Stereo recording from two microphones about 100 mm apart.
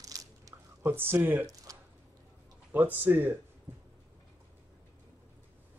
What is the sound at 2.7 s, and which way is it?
Speech, 20° right (ahead or behind).